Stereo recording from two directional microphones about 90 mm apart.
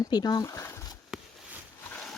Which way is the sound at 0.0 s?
50° left (ahead or behind).